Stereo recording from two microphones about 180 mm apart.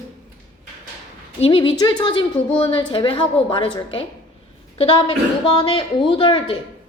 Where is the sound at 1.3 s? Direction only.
30° left (ahead or behind).